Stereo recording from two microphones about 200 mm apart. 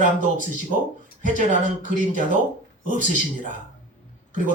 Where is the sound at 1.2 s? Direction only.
40° right (ahead or behind).